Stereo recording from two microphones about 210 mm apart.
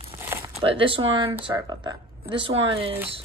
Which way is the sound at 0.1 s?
15° right (ahead or behind).